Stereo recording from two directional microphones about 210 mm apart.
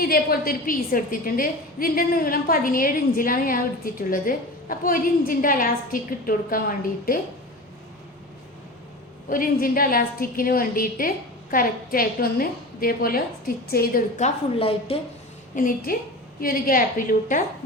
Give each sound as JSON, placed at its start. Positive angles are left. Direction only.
{"t": 0.0, "sound": "a woman's voice", "side_deg": 45}
{"t": 9.3, "sound": "a woman's voice", "side_deg": 40}
{"t": 15.5, "sound": "a woman's voice", "side_deg": 40}